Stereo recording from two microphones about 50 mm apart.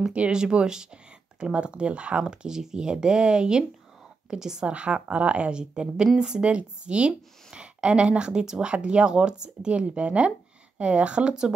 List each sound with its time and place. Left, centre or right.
0.0 s a woman's voice: centre